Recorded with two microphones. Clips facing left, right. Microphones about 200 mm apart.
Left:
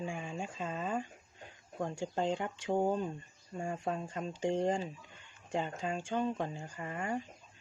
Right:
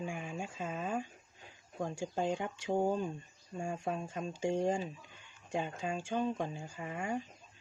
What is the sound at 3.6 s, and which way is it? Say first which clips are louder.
Speech: left 1 dB; 10° right (ahead or behind).